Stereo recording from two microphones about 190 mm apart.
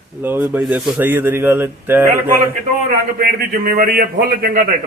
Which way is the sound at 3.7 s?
50° right (ahead or behind).